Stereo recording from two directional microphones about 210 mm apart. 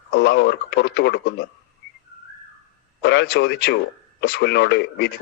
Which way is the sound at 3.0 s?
55° left (ahead or behind).